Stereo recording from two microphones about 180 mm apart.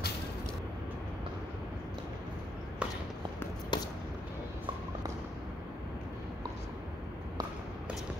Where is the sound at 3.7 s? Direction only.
25° left (ahead or behind).